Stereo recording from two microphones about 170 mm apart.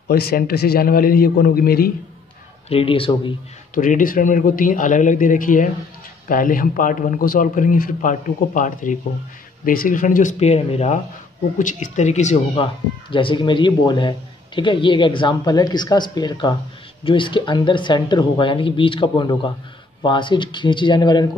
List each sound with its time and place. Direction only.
0.1 s a man's voice: 65° left (ahead or behind)
2.7 s speech: 30° left (ahead or behind)
3.7 s speech: 50° left (ahead or behind)
13.1 s a man's voice: 30° left (ahead or behind)